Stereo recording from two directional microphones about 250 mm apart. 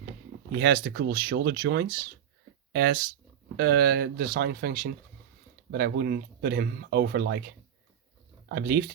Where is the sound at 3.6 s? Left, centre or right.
Right.